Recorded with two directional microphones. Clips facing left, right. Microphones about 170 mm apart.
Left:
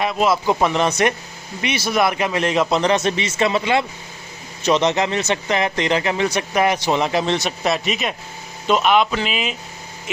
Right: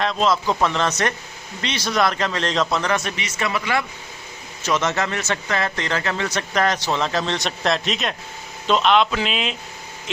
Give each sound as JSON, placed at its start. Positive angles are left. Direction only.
{"t": 0.0, "sound": "a man's voice", "side_deg": 10}
{"t": 7.3, "sound": "a man's voice", "side_deg": 5}